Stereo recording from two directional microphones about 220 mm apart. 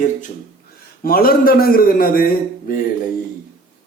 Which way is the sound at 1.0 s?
40° left (ahead or behind).